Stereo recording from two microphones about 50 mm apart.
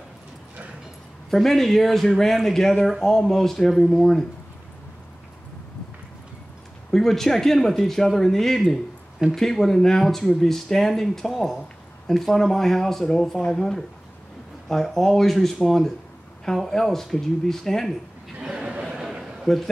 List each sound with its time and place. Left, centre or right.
1.3 s speech: centre
6.9 s speech: centre
18.6 s a sound: centre
19.4 s a man's voice: centre